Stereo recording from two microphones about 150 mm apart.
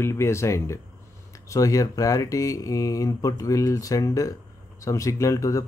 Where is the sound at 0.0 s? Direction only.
15° left (ahead or behind).